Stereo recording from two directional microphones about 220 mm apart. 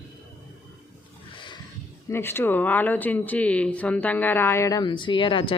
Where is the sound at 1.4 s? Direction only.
20° left (ahead or behind).